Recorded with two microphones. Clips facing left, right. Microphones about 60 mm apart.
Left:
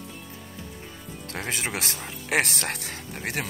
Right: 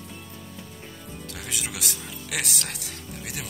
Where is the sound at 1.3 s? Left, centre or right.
Left.